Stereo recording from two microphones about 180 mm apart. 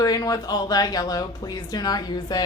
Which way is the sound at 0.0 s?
20° left (ahead or behind).